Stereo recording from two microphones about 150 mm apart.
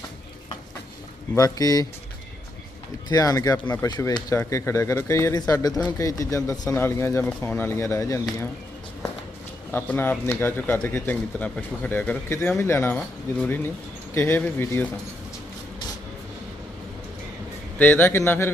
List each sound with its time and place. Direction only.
1.4 s speech: 25° left (ahead or behind)
3.1 s speech: 25° left (ahead or behind)
9.7 s speech: 10° left (ahead or behind)
14.1 s speech: 15° left (ahead or behind)
17.7 s speech: 10° left (ahead or behind)